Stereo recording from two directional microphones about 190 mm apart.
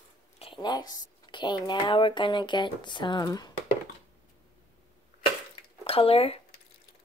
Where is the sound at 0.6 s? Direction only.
20° left (ahead or behind).